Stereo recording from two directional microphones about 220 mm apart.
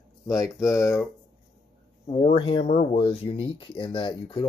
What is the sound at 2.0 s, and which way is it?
Speech, 25° left (ahead or behind).